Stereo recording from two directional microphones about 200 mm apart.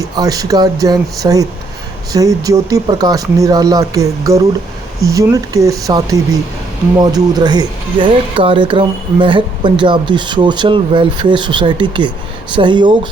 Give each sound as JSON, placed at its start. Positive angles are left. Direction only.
{"t": 0.0, "sound": "speech", "side_deg": -15}